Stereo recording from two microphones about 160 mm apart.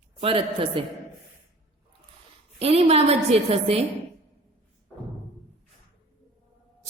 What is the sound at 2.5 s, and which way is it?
A woman's voice, 40° right (ahead or behind).